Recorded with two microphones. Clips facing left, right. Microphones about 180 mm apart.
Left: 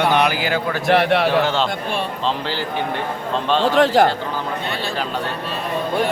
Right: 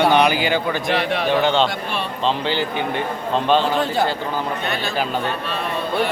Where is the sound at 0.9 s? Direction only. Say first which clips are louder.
Left 8 dB; 65° left (ahead or behind).